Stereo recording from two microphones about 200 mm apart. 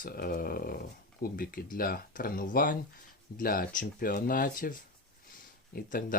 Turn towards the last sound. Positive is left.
turn(degrees=45)  # may be behind; listen again after turning